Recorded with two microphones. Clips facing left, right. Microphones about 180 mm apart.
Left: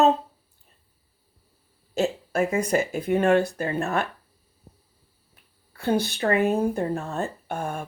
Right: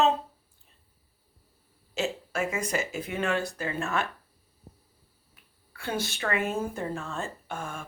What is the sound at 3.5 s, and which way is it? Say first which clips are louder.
Speech: left 5 dB; 35° left (ahead or behind).